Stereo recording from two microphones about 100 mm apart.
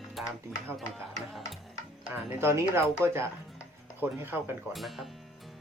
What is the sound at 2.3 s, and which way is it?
Speech, 25° right (ahead or behind).